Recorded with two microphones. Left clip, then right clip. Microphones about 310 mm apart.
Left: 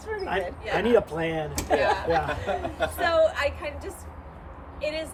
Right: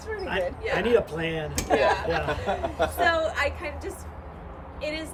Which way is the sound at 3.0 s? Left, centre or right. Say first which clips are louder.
Left 3 dB; centre.